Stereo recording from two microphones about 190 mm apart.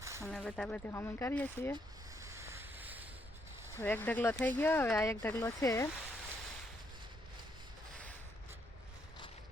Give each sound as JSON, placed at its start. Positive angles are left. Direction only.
{"t": 0.0, "sound": "a sound", "side_deg": -15}
{"t": 0.3, "sound": "speech", "side_deg": 5}
{"t": 2.2, "sound": "ocean", "side_deg": -15}
{"t": 3.8, "sound": "speech", "side_deg": 10}